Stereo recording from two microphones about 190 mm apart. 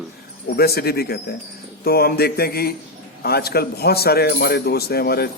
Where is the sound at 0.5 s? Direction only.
55° left (ahead or behind).